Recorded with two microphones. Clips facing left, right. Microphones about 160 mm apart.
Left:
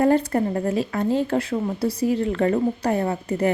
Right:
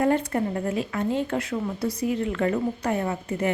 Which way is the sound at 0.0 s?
35° left (ahead or behind).